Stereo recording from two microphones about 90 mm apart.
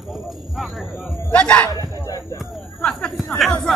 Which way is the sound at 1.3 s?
15° left (ahead or behind).